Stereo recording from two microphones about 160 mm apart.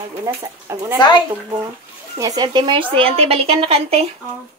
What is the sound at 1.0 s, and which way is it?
Speech, 30° left (ahead or behind).